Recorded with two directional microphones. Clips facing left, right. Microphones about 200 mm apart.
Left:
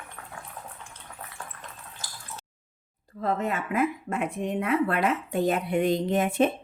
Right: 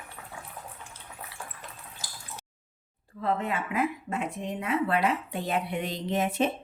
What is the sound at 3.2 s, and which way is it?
Speech, 45° left (ahead or behind).